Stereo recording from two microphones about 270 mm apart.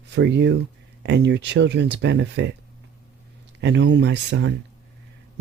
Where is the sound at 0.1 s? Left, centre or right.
Right.